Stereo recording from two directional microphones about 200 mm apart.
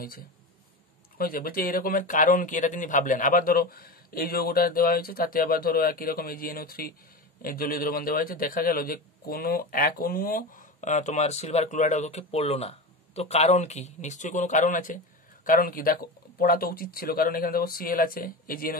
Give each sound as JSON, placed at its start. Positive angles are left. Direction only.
{"t": 1.1, "sound": "a man's voice", "side_deg": 45}